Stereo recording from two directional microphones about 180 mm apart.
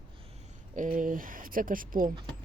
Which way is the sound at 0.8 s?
50° right (ahead or behind).